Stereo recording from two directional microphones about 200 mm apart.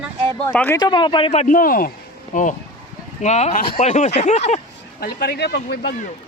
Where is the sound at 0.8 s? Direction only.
20° left (ahead or behind); by 5.9 s 55° left (ahead or behind).